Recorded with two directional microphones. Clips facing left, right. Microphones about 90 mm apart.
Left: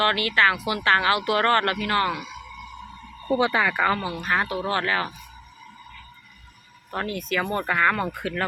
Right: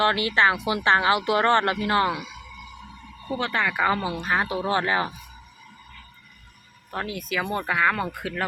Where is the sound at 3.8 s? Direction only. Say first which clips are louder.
Even; 20° right (ahead or behind).